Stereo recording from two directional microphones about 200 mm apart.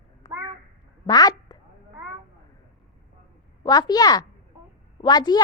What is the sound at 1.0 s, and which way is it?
Speech, 20° left (ahead or behind).